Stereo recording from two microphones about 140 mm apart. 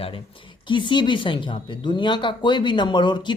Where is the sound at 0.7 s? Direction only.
35° left (ahead or behind).